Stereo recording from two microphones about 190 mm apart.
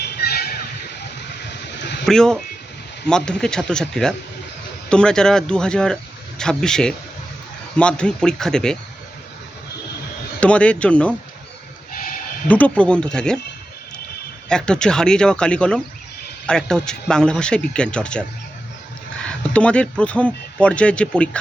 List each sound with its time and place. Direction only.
0.0 s vehicle: 55° left (ahead or behind)
1.8 s a sound: 65° left (ahead or behind)
2.0 s speech: 5° left (ahead or behind)
10.4 s speech: 5° left (ahead or behind)
11.9 s bleat: 50° left (ahead or behind)
12.5 s speech: 5° left (ahead or behind)
14.5 s speech: 5° left (ahead or behind)